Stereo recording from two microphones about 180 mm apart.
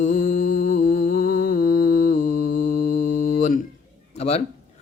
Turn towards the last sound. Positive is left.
turn(degrees=35)  # may be behind; listen again after turning